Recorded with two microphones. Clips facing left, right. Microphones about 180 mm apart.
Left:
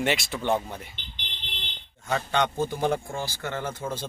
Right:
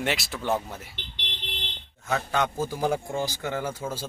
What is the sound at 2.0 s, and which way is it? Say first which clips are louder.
Speech: left 1 dB; 5° right (ahead or behind).